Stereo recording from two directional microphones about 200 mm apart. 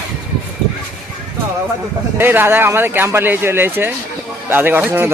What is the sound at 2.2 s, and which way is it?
Speech, 10° right (ahead or behind).